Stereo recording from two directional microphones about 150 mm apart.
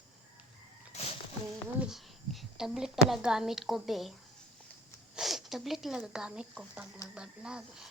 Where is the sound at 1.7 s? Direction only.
5° right (ahead or behind).